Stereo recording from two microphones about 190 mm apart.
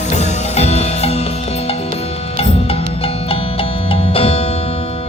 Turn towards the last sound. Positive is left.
turn(degrees=30)  # may be behind; listen again after turning